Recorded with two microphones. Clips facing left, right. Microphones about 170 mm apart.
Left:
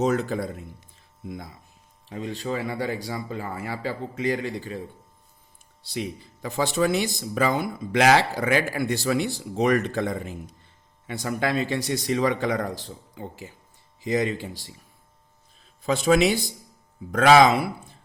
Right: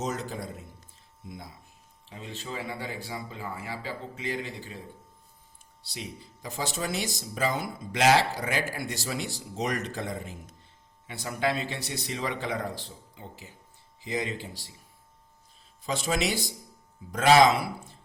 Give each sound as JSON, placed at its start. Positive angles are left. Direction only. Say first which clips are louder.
{"t": 0.0, "sound": "speech", "louder": "left 9 dB", "side_deg": 60}
{"t": 2.0, "sound": "a man's voice", "louder": "left 9 dB", "side_deg": 50}
{"t": 2.4, "sound": "speech", "louder": "left 7 dB", "side_deg": 60}
{"t": 5.9, "sound": "a man's voice", "louder": "left 9 dB", "side_deg": 60}
{"t": 17.1, "sound": "speech", "louder": "left 4 dB", "side_deg": 60}